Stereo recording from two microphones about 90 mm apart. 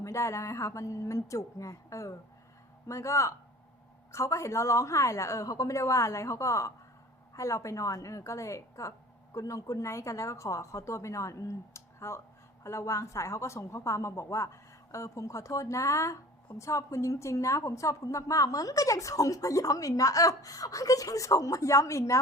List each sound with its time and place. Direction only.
0.0 s a woman's voice: 35° left (ahead or behind)